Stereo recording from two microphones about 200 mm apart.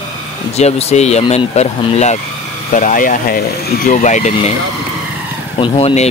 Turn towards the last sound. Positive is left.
turn(degrees=30)  # may be behind; listen again after turning